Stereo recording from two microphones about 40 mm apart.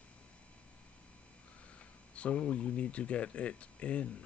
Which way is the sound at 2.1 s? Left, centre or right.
Left.